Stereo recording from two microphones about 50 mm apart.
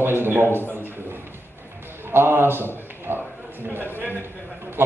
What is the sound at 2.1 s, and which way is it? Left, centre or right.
A man's voice, right.